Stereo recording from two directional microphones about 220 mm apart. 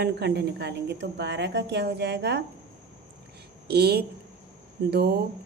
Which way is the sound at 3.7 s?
45° right (ahead or behind).